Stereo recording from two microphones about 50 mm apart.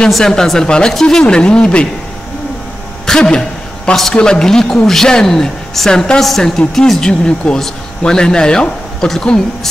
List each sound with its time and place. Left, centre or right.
0.2 s a woman's voice: centre
3.1 s a sound: centre
4.1 s a woman's voice: centre